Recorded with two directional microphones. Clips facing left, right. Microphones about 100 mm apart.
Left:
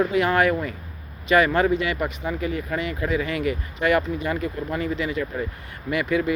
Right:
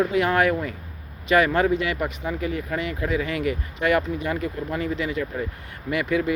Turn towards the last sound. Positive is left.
turn(degrees=35)  # may be behind; listen again after turning